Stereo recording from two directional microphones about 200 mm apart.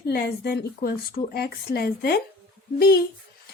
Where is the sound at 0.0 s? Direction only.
55° left (ahead or behind).